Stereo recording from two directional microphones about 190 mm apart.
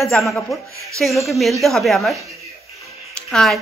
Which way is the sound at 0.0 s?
Centre (ahead or behind).